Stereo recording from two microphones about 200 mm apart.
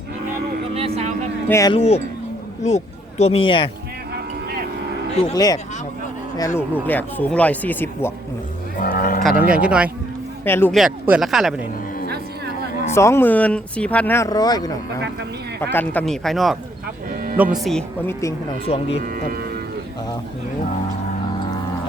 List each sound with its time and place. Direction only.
0.7 s vehicle: 30° right (ahead or behind)
1.5 s speech: 15° left (ahead or behind)
1.7 s speech: 30° left (ahead or behind)
5.3 s speech: 20° left (ahead or behind)
8.8 s cattle: 45° left (ahead or behind)
9.6 s speech: 5° right (ahead or behind)
10.4 s speech: 10° left (ahead or behind)
10.8 s speech: 5° right (ahead or behind)
12.8 s speech: 15° left (ahead or behind)
15.7 s speech: 10° left (ahead or behind)
18.6 s speech: 30° left (ahead or behind)
19.0 s speech: 45° right (ahead or behind)